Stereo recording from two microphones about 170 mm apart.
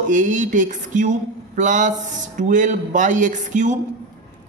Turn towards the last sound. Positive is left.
turn(degrees=-45)  # may be behind; listen again after turning